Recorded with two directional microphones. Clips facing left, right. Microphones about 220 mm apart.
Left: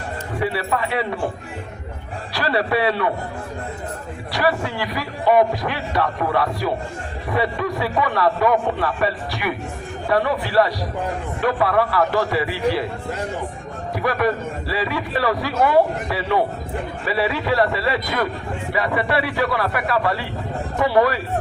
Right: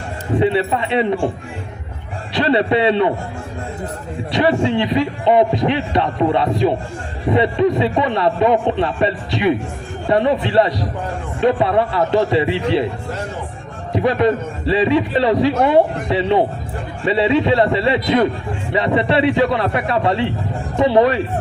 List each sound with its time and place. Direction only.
0.3 s a man's voice: 25° right (ahead or behind)
2.3 s a man's voice: 20° right (ahead or behind)
4.3 s a man's voice: 25° right (ahead or behind)
13.9 s a man's voice: 20° right (ahead or behind)